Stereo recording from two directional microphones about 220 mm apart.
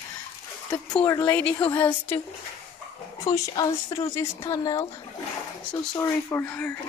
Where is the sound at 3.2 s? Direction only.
15° left (ahead or behind).